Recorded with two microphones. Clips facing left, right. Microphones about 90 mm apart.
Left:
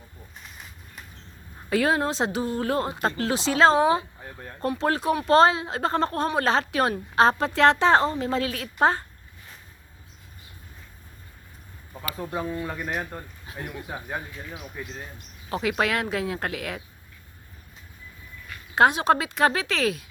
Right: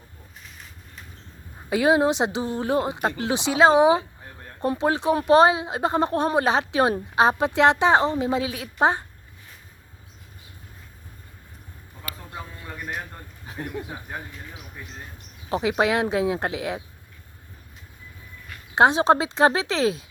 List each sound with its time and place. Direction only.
1.7 s speech: 15° right (ahead or behind)
12.6 s speech: 10° left (ahead or behind)
15.4 s speech: 20° right (ahead or behind)
18.7 s speech: 25° right (ahead or behind)